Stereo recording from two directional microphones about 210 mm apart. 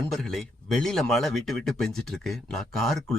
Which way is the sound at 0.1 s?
Centre (ahead or behind).